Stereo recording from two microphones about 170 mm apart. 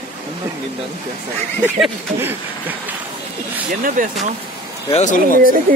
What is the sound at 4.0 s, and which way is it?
Speech, 50° right (ahead or behind).